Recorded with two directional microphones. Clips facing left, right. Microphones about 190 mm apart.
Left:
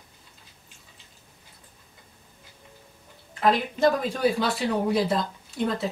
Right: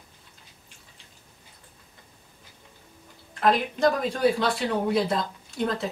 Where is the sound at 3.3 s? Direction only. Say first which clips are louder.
Even; 5° left (ahead or behind).